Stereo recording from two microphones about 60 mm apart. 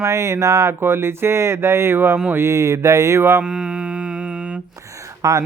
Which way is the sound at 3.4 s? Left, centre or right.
Centre.